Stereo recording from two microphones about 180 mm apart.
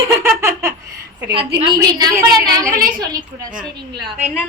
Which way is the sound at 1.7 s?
20° right (ahead or behind).